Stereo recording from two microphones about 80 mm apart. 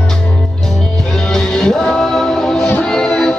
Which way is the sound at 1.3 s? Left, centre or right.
Centre.